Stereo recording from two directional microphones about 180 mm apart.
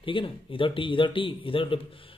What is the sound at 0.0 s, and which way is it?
Speech, 30° left (ahead or behind).